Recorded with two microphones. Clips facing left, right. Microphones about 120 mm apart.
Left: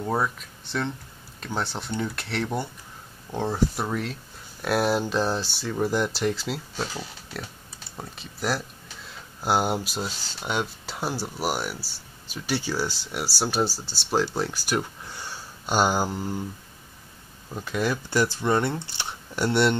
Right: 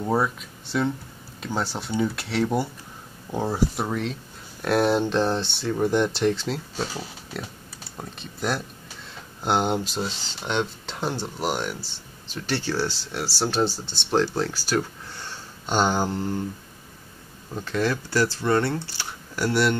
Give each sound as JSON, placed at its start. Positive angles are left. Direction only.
{"t": 0.0, "sound": "speech", "side_deg": -5}
{"t": 17.6, "sound": "speech", "side_deg": 10}